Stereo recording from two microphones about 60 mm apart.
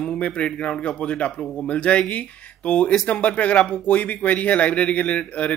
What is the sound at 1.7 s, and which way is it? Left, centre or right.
A man's voice, left.